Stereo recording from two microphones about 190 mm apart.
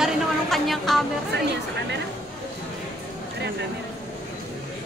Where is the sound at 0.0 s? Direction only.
Centre (ahead or behind).